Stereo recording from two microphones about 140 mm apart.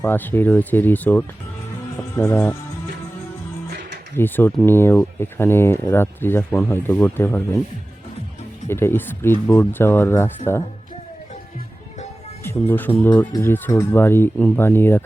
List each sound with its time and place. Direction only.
0.0 s speech: 15° left (ahead or behind)
4.1 s speech: 15° left (ahead or behind)
8.6 s speech: 15° left (ahead or behind)
12.4 s speech: 15° left (ahead or behind)